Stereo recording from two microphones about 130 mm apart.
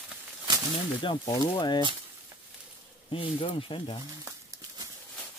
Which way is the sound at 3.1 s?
45° left (ahead or behind).